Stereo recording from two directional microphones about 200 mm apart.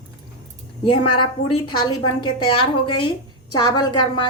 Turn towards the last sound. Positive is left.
turn(degrees=20)  # may be behind; listen again after turning